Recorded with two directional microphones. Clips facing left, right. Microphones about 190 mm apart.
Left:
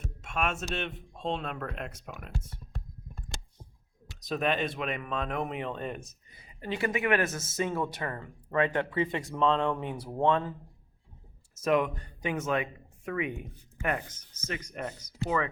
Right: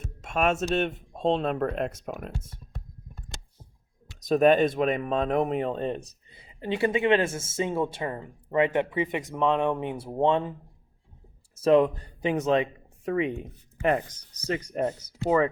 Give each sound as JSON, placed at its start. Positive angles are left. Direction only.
{"t": 0.2, "sound": "speech", "side_deg": -40}
{"t": 4.2, "sound": "speech", "side_deg": -45}
{"t": 11.5, "sound": "speech", "side_deg": -30}